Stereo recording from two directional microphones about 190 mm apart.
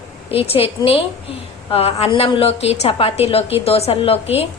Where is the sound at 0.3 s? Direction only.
30° left (ahead or behind).